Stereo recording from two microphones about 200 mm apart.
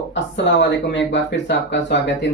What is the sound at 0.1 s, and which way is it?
Speech, 65° left (ahead or behind).